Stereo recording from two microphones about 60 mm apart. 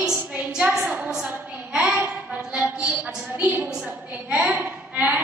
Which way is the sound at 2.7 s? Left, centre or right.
Right.